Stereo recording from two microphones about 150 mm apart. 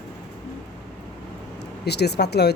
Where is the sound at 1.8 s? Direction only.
90° left.